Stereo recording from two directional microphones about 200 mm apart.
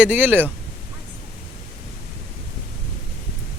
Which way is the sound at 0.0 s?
5° right (ahead or behind).